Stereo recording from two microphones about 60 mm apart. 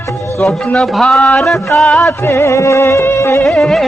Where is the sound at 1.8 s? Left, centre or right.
Centre.